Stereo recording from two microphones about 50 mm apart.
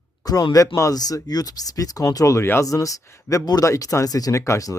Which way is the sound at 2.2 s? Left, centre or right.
Left.